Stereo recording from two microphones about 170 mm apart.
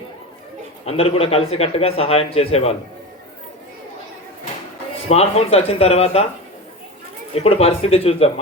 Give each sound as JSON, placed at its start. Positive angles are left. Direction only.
{"t": 0.9, "sound": "a man's voice", "side_deg": 35}
{"t": 5.0, "sound": "a man's voice", "side_deg": 35}
{"t": 7.3, "sound": "a man's voice", "side_deg": 35}